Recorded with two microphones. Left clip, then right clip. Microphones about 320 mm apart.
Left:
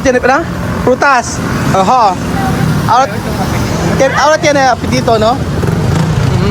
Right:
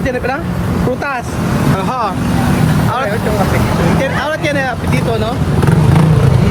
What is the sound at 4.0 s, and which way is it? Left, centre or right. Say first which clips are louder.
Speech: left 8 dB; centre.